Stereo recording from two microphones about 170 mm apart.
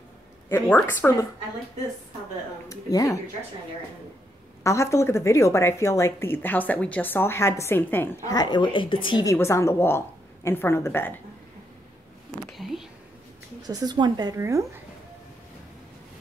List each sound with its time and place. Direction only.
0.5 s a woman's voice: 10° left (ahead or behind)
2.7 s speech: 20° left (ahead or behind)
4.6 s a woman's voice: 15° left (ahead or behind)
9.2 s a woman's voice: 15° left (ahead or behind)
12.5 s speech: centre (ahead or behind)
13.6 s a woman's voice: 25° right (ahead or behind)